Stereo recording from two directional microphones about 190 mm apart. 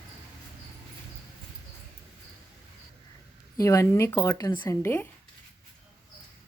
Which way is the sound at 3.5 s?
15° left (ahead or behind).